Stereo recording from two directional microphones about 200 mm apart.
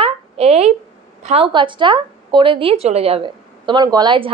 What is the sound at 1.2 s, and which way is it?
A woman's voice, 30° right (ahead or behind).